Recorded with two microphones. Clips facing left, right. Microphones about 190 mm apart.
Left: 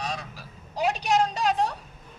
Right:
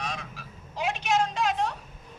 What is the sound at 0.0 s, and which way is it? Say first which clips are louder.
Vehicle: left 2 dB; 35° left (ahead or behind).